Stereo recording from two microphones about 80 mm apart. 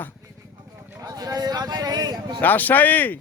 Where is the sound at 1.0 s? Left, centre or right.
Right.